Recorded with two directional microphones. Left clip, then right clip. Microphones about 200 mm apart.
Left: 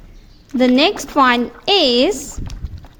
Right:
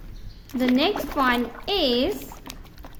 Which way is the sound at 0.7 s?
40° left (ahead or behind).